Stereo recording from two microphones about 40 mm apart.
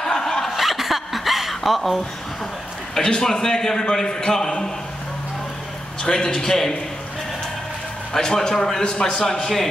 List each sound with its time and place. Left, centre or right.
0.0 s snicker: centre
0.6 s zipper: centre
3.0 s a man's voice: left
6.0 s a man's voice: centre
8.1 s a man's voice: centre
8.8 s a man's voice: left
9.2 s a man's voice: centre